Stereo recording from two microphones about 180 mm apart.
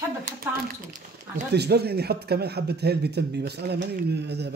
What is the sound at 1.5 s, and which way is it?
Speech, 65° right (ahead or behind).